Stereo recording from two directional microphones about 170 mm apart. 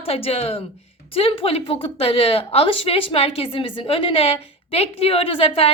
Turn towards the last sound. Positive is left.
turn(degrees=35)  # may be behind; listen again after turning